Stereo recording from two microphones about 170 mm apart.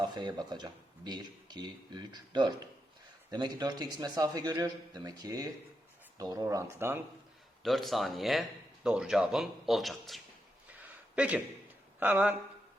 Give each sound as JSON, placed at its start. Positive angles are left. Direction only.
{"t": 0.0, "sound": "speech", "side_deg": -25}
{"t": 7.6, "sound": "speech", "side_deg": 0}
{"t": 10.7, "sound": "a sound", "side_deg": -5}
{"t": 11.9, "sound": "speech", "side_deg": -10}